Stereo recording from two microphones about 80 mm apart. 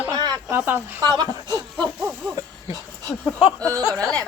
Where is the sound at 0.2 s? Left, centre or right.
Right.